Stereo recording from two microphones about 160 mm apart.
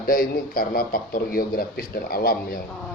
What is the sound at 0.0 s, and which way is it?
A man's voice, 65° left (ahead or behind).